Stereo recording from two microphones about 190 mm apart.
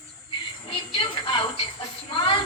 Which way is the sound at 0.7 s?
25° left (ahead or behind).